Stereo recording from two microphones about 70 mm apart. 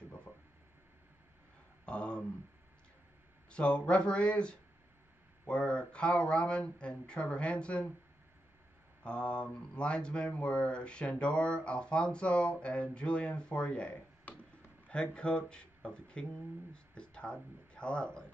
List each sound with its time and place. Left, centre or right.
1.9 s a sound: centre
3.4 s speech: centre
9.0 s speech: centre